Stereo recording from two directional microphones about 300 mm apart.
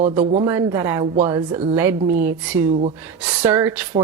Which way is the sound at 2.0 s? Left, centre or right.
Right.